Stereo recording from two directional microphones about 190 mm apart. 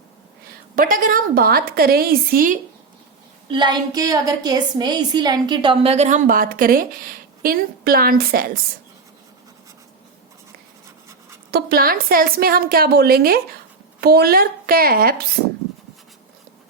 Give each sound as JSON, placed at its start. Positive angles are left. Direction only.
{"t": 0.8, "sound": "a woman's voice", "side_deg": -45}
{"t": 3.5, "sound": "a woman's voice", "side_deg": -25}
{"t": 11.5, "sound": "a woman's voice", "side_deg": -50}